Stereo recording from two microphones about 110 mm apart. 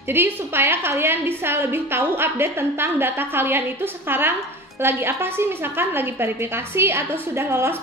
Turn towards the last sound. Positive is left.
turn(degrees=-20)  # may be behind; listen again after turning